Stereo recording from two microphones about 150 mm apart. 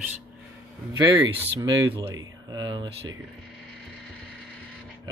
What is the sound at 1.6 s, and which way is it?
Speech, 25° right (ahead or behind).